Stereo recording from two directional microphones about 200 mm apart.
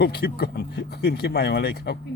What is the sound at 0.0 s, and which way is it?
Speech, 55° left (ahead or behind).